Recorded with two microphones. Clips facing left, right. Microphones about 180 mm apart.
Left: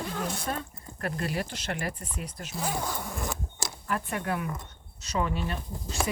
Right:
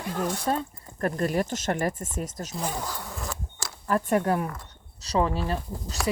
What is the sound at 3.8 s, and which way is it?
Speech, 40° right (ahead or behind).